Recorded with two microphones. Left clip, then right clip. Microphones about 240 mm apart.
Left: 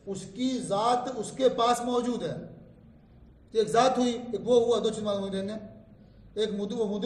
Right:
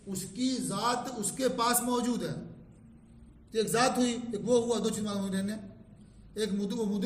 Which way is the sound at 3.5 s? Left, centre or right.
Centre.